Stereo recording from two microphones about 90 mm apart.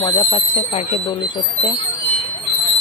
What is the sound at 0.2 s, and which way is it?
Speech, 90° left.